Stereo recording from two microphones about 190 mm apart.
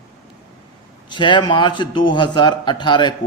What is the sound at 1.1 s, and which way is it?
A man's voice, 25° left (ahead or behind).